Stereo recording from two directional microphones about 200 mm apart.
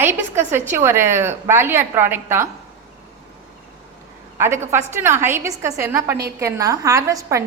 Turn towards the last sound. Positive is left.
turn(degrees=-15)  # may be behind; listen again after turning